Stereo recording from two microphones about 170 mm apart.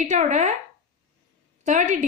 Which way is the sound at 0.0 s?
45° right (ahead or behind).